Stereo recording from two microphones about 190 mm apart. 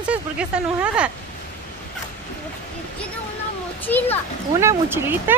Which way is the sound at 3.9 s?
10° left (ahead or behind).